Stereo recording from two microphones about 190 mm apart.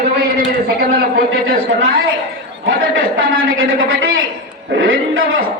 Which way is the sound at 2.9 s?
90° right.